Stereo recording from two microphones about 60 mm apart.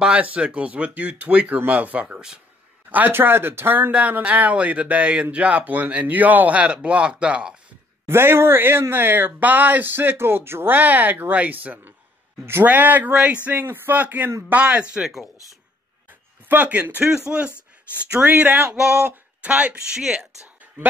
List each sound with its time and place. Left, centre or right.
0.0 s a man's voice: right
2.9 s speech: right
4.2 s speech: right
8.1 s speech: right
13.5 s speech: right; by 15.0 s centre
16.4 s speech: right
17.0 s a man's voice: centre
18.2 s speech: right
20.0 s a man's voice: centre